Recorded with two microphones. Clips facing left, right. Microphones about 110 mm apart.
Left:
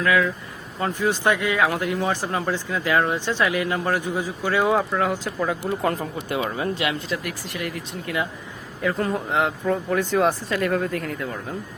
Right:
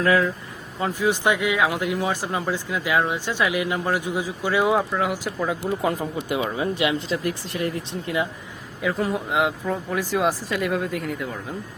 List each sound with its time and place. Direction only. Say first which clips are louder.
0.0 s speech: right 1 dB; 30° right (ahead or behind)
0.8 s speech: even; 10° right (ahead or behind)
8.8 s speech: even; 5° right (ahead or behind)